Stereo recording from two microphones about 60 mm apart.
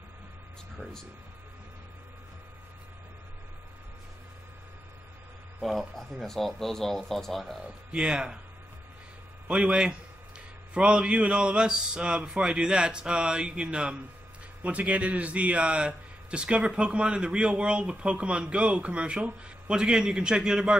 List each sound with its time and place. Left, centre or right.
5.6 s speech: centre
7.6 s a man's voice: centre
9.5 s a man's voice: centre